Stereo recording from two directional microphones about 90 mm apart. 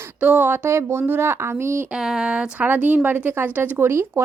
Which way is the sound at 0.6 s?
30° right (ahead or behind).